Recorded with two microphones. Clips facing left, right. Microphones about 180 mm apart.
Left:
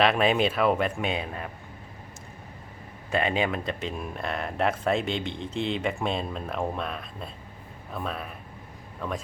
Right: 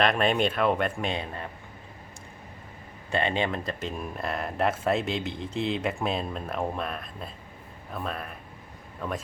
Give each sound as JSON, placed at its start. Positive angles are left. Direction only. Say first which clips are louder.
{"t": 0.0, "sound": "speech", "louder": "left 2 dB", "side_deg": 5}
{"t": 3.1, "sound": "speech", "louder": "left 1 dB", "side_deg": 5}